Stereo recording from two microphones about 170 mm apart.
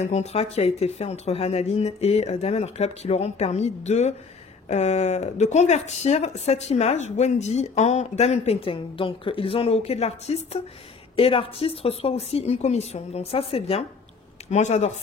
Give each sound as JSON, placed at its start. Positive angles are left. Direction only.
{"t": 0.0, "sound": "speech", "side_deg": 40}